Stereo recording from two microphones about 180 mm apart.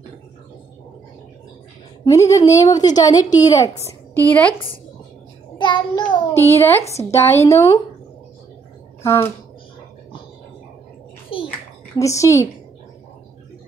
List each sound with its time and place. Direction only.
2.0 s a woman's voice: 15° left (ahead or behind)
4.3 s a woman's voice: 10° left (ahead or behind)
5.6 s child singing: 25° left (ahead or behind)
6.6 s a woman's voice: 15° left (ahead or behind)
9.0 s speech: 15° left (ahead or behind)
11.3 s a sound: 30° left (ahead or behind)
12.0 s a woman's voice: 15° left (ahead or behind)